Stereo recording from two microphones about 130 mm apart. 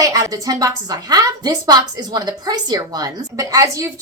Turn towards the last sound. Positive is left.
turn(degrees=-25)  # may be behind; listen again after turning